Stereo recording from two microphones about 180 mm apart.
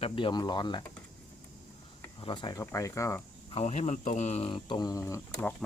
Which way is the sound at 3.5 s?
35° left (ahead or behind).